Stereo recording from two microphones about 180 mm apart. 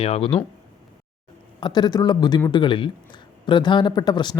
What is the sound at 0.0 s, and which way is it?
Speech, 30° left (ahead or behind).